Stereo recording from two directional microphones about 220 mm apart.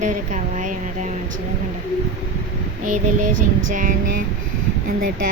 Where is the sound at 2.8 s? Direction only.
90° right.